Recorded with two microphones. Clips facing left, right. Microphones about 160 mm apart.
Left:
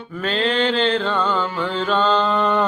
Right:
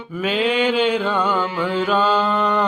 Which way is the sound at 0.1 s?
10° right (ahead or behind).